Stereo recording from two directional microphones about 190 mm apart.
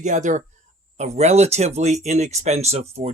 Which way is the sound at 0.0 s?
40° right (ahead or behind).